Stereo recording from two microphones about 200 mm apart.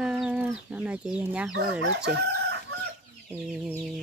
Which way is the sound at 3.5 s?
5° right (ahead or behind).